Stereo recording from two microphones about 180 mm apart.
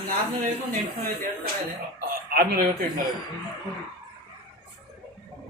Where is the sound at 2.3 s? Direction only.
55° right (ahead or behind).